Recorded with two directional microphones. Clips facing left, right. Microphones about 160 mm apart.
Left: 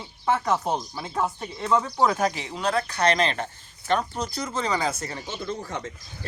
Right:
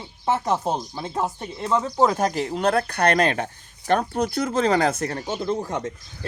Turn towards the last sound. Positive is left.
turn(degrees=-50)  # may be behind; listen again after turning